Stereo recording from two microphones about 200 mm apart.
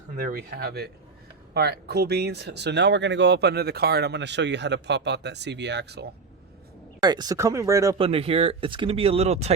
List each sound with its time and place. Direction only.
0.2 s speech: 45° right (ahead or behind)
7.0 s speech: 20° right (ahead or behind)
7.9 s speech: 30° right (ahead or behind)